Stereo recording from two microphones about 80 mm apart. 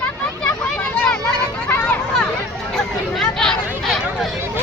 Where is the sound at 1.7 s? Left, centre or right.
Left.